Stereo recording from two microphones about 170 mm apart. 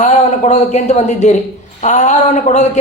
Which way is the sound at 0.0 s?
45° left (ahead or behind).